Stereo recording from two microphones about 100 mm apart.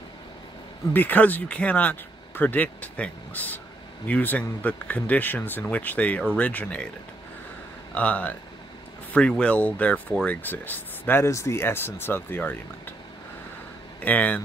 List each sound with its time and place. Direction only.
0.9 s speech: 15° left (ahead or behind)
7.9 s speech: 15° left (ahead or behind)
9.4 s speech: 15° left (ahead or behind)
11.2 s speech: 30° left (ahead or behind)
14.0 s speech: 15° left (ahead or behind)